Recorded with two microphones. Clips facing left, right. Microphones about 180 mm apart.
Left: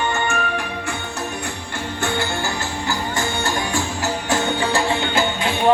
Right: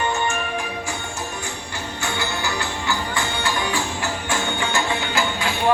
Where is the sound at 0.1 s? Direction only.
60° left (ahead or behind).